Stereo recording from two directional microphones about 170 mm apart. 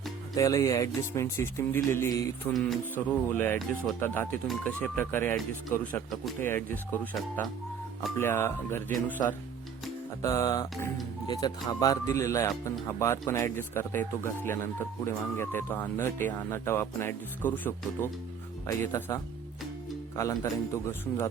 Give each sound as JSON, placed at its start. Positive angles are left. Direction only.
{"t": 0.3, "sound": "speech", "side_deg": 20}